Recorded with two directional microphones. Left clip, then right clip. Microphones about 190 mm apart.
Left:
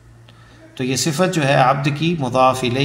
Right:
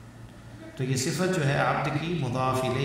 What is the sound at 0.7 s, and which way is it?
Speech, 25° left (ahead or behind).